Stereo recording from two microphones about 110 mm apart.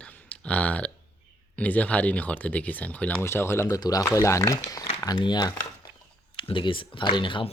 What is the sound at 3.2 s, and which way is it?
Speech, 25° left (ahead or behind).